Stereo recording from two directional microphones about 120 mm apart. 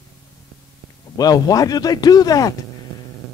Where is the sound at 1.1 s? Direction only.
30° left (ahead or behind).